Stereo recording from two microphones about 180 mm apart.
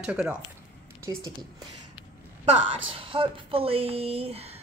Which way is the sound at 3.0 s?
30° right (ahead or behind).